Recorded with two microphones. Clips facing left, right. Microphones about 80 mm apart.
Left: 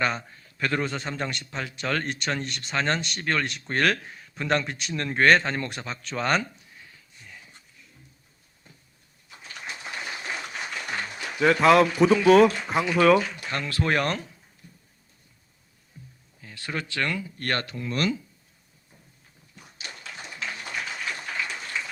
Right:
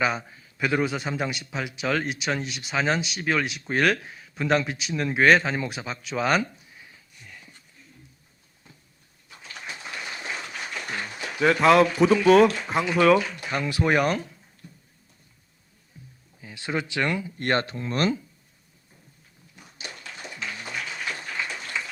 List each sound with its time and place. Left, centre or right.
0.0 s a man's voice: centre
7.3 s a sound: centre
11.3 s a man's voice: centre
13.5 s speech: centre
16.4 s speech: centre; by 18.2 s right